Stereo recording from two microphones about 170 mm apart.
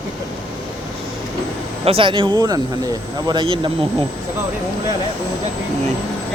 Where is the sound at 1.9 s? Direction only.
30° right (ahead or behind).